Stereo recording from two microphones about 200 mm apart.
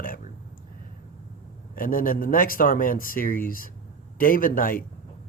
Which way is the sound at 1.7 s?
45° left (ahead or behind).